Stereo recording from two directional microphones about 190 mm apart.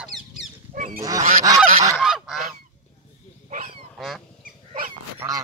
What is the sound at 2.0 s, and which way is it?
Goose, 5° right (ahead or behind).